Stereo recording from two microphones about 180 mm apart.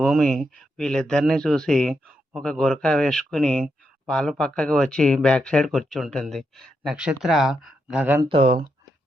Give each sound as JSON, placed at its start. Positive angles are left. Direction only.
{"t": 0.0, "sound": "speech", "side_deg": 0}
{"t": 8.2, "sound": "speech", "side_deg": -30}